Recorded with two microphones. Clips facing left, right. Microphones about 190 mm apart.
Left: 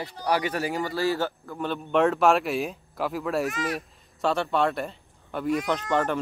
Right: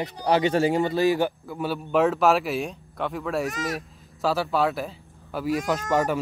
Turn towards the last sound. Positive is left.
turn(degrees=-10)  # may be behind; listen again after turning